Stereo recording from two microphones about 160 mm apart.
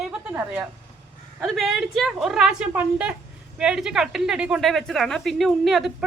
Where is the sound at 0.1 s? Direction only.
10° right (ahead or behind).